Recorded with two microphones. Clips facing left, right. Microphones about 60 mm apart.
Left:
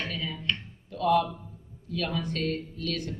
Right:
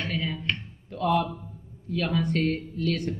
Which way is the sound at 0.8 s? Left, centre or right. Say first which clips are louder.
Even; right.